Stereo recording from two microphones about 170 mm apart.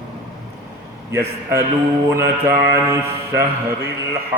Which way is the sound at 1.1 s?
15° right (ahead or behind).